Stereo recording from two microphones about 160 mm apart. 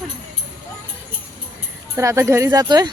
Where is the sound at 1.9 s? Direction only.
20° right (ahead or behind).